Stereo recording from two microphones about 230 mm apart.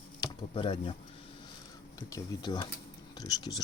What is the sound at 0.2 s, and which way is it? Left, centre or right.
Speech, left.